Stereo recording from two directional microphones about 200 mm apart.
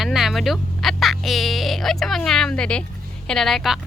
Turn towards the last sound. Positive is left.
turn(degrees=0)  # may be behind; listen again after turning